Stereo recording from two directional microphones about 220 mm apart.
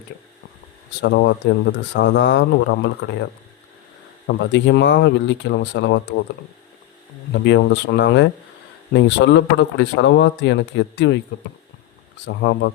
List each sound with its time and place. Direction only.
1.0 s speech: 50° left (ahead or behind)
4.3 s speech: 55° left (ahead or behind)
7.4 s speech: 55° left (ahead or behind)
12.2 s speech: 50° left (ahead or behind)